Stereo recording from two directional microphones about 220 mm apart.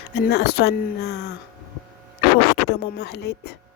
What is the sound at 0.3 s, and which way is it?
Speech, 50° left (ahead or behind).